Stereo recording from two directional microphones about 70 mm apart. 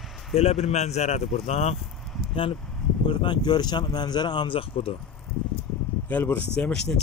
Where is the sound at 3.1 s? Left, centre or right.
Left.